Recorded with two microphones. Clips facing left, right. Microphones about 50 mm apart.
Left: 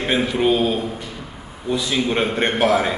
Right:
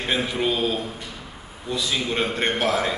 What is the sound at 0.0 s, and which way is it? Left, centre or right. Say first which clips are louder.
A man's voice: left 5 dB; centre.